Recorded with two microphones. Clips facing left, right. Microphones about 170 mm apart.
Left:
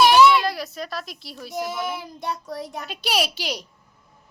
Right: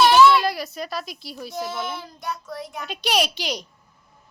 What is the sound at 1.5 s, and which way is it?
Speech, 15° left (ahead or behind).